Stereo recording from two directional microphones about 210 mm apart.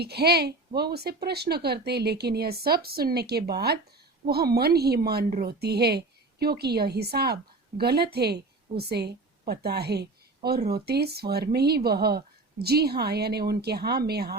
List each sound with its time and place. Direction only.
0.0 s a woman's voice: 50° right (ahead or behind)